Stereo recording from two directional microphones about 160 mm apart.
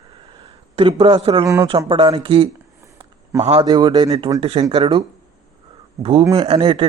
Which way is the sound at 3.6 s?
25° right (ahead or behind).